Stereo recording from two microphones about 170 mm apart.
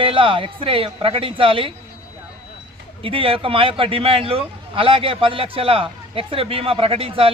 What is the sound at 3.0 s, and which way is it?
A man's voice, 30° right (ahead or behind).